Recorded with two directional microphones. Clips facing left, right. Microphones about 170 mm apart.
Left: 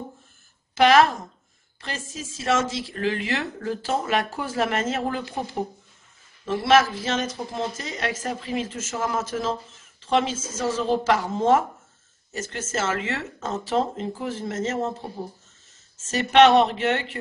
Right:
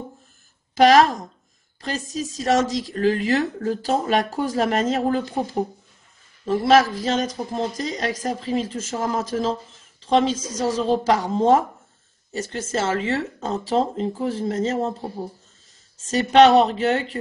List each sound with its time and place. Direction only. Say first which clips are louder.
0.7 s a woman's voice: right 3 dB; 35° right (ahead or behind)
10.3 s speech: right 4 dB; 15° right (ahead or behind)
10.8 s a woman's voice: right 2 dB; 35° right (ahead or behind)
16.1 s a woman's voice: right 2 dB; 35° right (ahead or behind)